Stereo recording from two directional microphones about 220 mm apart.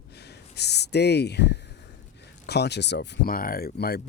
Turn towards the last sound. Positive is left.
turn(degrees=45)  # may be behind; listen again after turning